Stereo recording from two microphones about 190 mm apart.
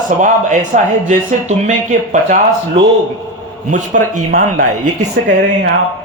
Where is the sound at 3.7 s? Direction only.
40° right (ahead or behind).